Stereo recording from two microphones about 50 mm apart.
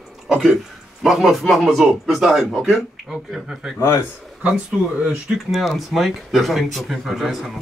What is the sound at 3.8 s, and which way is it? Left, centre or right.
Speech, left.